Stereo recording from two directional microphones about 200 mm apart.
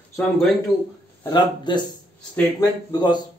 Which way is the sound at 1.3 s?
20° left (ahead or behind).